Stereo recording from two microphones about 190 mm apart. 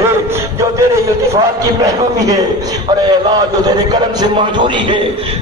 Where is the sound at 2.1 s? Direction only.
20° right (ahead or behind).